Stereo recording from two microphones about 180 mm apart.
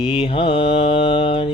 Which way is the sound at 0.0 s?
30° left (ahead or behind).